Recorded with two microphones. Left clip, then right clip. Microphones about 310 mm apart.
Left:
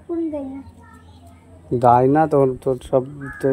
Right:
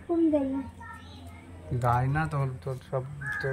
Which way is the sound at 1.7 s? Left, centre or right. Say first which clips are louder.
Left 15 dB; left.